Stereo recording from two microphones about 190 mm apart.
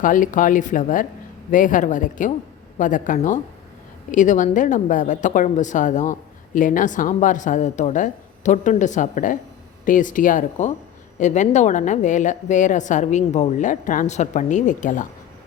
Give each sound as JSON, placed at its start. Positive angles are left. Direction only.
{"t": 0.0, "sound": "a woman's voice", "side_deg": 45}